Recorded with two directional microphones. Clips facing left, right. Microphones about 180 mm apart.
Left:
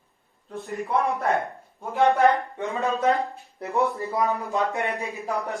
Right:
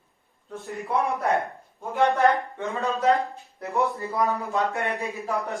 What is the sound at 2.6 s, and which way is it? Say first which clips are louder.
Speech: left 1 dB; 15° left (ahead or behind).